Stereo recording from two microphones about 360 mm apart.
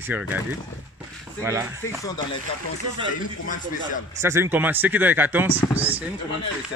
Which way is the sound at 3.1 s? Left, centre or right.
Left.